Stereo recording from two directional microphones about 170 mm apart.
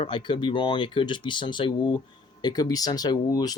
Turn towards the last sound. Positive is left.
turn(degrees=20)  # may be behind; listen again after turning